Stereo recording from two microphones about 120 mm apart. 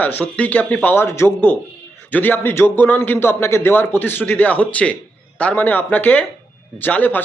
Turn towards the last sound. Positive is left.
turn(degrees=15)  # may be behind; listen again after turning